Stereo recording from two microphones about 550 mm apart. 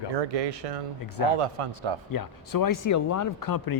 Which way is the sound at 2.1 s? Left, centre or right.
Left.